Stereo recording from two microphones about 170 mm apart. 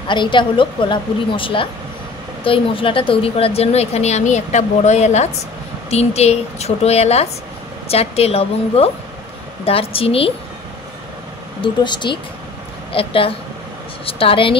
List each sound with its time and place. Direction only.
0.1 s a woman's voice: 30° left (ahead or behind)
11.6 s a woman's voice: 25° left (ahead or behind)